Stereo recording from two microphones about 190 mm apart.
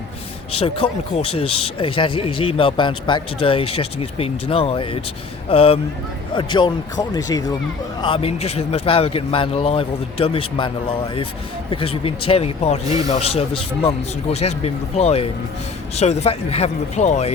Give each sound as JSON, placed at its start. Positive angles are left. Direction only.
{"t": 0.5, "sound": "speech", "side_deg": 30}